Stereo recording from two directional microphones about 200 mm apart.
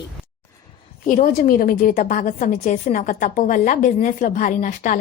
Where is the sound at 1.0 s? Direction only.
40° left (ahead or behind).